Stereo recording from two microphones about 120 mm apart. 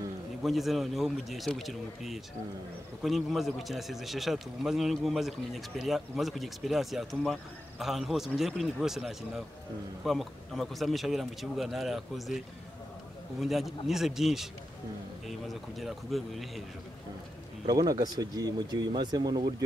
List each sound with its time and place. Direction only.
0.4 s speech: centre (ahead or behind)
13.4 s speech: centre (ahead or behind)
17.6 s speech: 30° right (ahead or behind)